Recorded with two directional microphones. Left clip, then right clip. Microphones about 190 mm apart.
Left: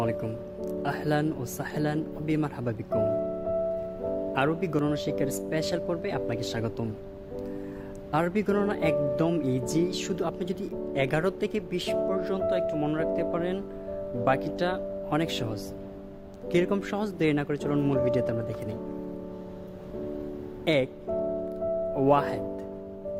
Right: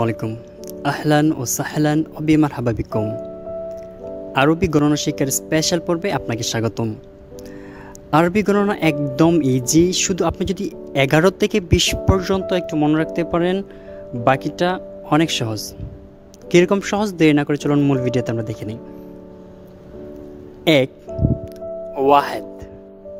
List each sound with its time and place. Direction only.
0.0 s speech: 50° right (ahead or behind)
4.4 s speech: 50° right (ahead or behind)
8.1 s speech: 50° right (ahead or behind)
20.7 s speech: 50° right (ahead or behind)
21.9 s speech: 50° right (ahead or behind)